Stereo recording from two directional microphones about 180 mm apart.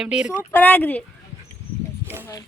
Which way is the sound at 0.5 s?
10° left (ahead or behind).